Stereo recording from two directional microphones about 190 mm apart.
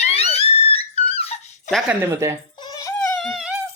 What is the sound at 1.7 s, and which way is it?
Speech, 10° right (ahead or behind).